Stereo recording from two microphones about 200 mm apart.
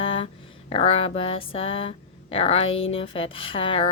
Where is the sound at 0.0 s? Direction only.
25° left (ahead or behind).